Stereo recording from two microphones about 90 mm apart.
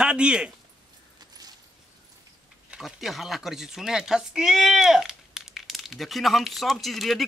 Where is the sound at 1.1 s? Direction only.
45° right (ahead or behind).